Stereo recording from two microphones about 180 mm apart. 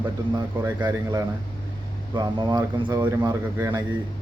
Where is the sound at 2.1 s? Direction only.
25° right (ahead or behind).